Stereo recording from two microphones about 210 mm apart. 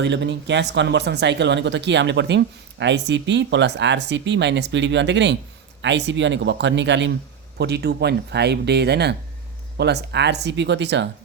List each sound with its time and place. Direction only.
0.0 s speech: 55° right (ahead or behind)